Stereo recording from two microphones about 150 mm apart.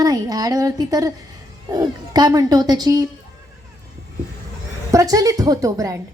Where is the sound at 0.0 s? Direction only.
25° right (ahead or behind).